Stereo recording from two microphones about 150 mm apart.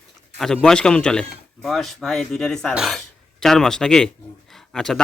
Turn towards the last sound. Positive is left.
turn(degrees=5)  # may be behind; listen again after turning